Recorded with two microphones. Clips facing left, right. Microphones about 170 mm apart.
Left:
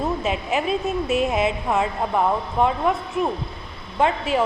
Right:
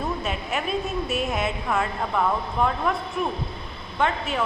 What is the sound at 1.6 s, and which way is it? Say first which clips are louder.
A woman's voice: left 3 dB; 25° left (ahead or behind).